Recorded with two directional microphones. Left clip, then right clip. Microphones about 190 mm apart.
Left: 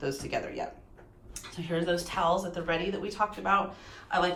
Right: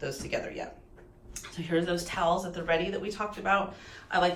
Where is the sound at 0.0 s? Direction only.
25° left (ahead or behind).